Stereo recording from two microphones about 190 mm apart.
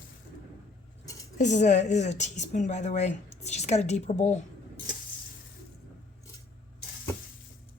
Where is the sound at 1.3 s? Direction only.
40° left (ahead or behind).